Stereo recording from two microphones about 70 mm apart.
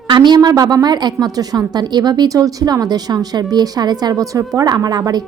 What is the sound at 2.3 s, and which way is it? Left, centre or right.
A woman's voice, right.